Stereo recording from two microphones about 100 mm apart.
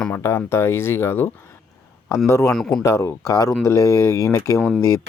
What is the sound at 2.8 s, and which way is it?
Speech, 30° left (ahead or behind).